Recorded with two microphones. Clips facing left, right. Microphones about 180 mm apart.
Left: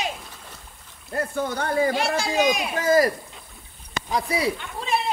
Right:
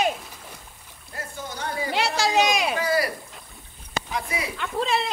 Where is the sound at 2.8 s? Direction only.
45° left (ahead or behind).